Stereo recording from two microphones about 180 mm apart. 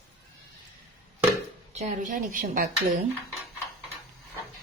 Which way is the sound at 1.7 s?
40° right (ahead or behind).